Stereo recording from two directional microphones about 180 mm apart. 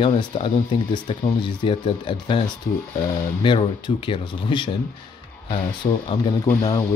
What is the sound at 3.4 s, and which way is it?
Speech, 25° left (ahead or behind).